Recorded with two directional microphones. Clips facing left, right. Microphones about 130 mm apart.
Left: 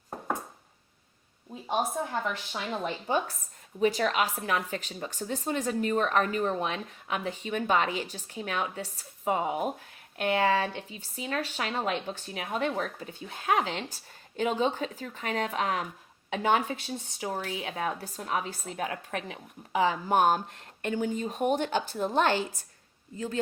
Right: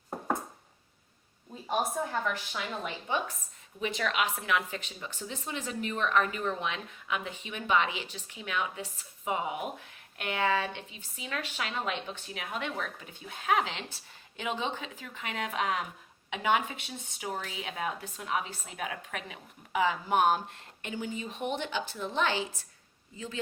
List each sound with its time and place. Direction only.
2.5 s speech: 35° left (ahead or behind)